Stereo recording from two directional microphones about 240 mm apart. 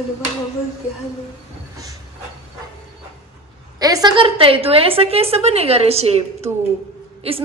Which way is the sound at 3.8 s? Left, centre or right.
Centre.